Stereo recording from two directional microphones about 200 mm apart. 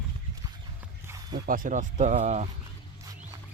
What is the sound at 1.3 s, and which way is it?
Speech, 45° right (ahead or behind).